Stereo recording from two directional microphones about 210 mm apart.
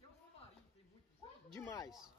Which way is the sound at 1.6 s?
15° left (ahead or behind).